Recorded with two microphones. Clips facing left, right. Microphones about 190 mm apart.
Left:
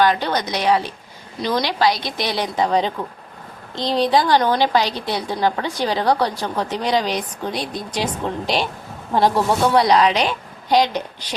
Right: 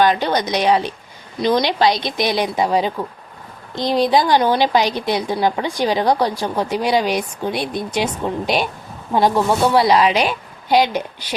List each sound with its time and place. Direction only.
0.0 s a woman's voice: 20° right (ahead or behind)
9.1 s a woman's voice: centre (ahead or behind)